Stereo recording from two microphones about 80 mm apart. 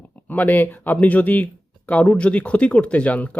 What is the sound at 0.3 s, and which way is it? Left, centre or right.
Speech, left.